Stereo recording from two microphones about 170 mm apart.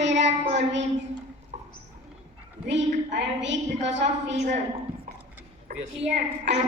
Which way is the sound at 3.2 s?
90° right.